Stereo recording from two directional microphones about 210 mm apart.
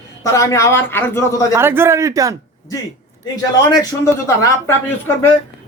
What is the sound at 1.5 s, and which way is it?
Speech, 10° right (ahead or behind).